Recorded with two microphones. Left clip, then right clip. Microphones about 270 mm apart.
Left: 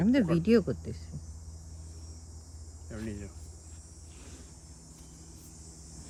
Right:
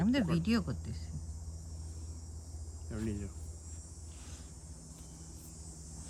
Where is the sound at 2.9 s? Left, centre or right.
Centre.